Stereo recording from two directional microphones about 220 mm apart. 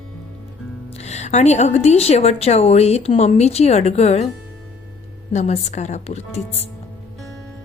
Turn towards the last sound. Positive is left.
turn(degrees=30)  # may be behind; listen again after turning